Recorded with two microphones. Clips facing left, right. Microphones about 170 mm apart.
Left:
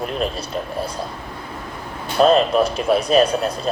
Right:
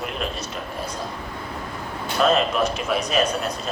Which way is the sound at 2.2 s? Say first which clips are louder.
Left 5 dB; 30° left (ahead or behind).